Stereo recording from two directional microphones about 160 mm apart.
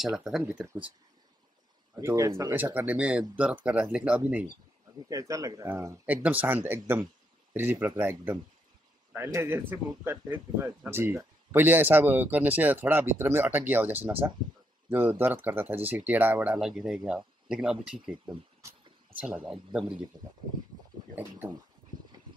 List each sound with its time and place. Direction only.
0.0 s speech: centre (ahead or behind)
2.0 s speech: 20° right (ahead or behind)
5.3 s speech: 20° right (ahead or behind); by 18.1 s 5° right (ahead or behind)
18.6 s a sound: 15° right (ahead or behind)
20.1 s speech: 30° right (ahead or behind)